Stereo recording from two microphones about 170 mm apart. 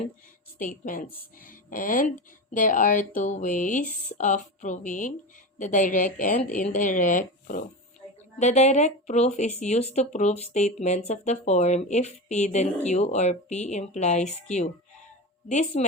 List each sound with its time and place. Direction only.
0.6 s speech: 50° left (ahead or behind)